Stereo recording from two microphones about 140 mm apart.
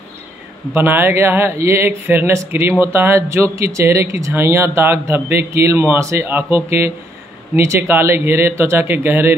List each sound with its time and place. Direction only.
0.7 s speech: 15° right (ahead or behind)